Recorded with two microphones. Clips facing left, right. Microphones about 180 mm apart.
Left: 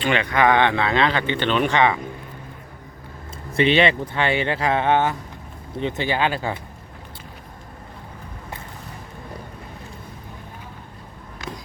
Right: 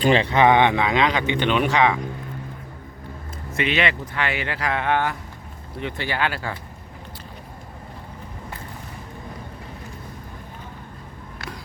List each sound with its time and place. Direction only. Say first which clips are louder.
0.0 s speech: right 3 dB; 30° right (ahead or behind); by 2.0 s centre (ahead or behind)
3.5 s speech: left 6 dB; 30° left (ahead or behind)